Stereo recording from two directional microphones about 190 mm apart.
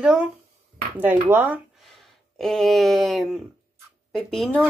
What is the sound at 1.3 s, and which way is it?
Speech, 10° right (ahead or behind).